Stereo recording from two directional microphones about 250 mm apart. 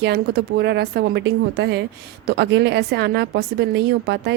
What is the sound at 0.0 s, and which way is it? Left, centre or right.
A woman's voice, right.